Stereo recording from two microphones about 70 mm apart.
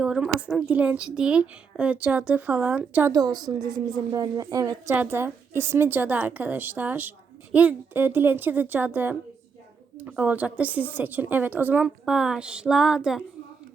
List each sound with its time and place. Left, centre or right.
0.0 s a sound: centre
0.3 s a woman's voice: centre
3.1 s a woman's voice: right
4.1 s speech: right
5.0 s a woman's voice: right
12.0 s a woman's voice: centre